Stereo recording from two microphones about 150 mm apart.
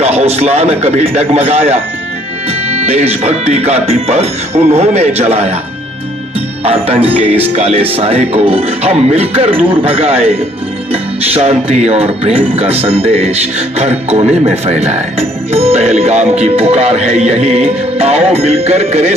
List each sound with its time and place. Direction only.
0.0 s speech: 45° right (ahead or behind)
6.7 s speech: 40° right (ahead or behind)